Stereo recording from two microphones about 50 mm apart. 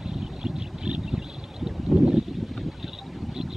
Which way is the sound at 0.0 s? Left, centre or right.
Centre.